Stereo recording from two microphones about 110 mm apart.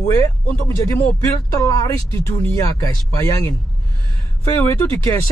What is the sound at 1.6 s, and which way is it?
Speech, 30° left (ahead or behind).